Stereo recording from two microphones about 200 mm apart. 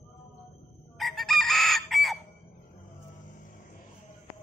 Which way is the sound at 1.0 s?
Centre (ahead or behind).